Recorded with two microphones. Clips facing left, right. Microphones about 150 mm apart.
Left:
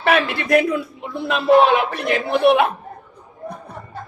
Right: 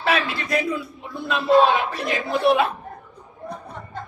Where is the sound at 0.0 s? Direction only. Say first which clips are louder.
Left 5 dB; 60° left (ahead or behind).